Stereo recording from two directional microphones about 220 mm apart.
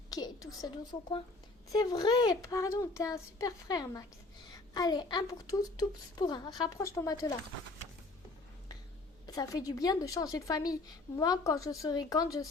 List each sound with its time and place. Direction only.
0.1 s a woman's voice: 15° left (ahead or behind)
9.2 s a woman's voice: 15° left (ahead or behind)